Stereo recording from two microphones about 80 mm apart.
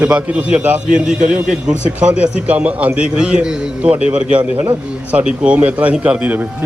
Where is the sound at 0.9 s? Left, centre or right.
Centre.